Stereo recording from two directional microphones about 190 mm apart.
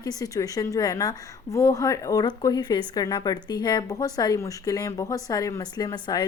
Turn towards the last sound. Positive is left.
turn(degrees=20)  # may be behind; listen again after turning